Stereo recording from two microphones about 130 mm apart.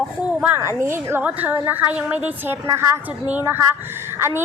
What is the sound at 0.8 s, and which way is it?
A woman's voice, 20° right (ahead or behind).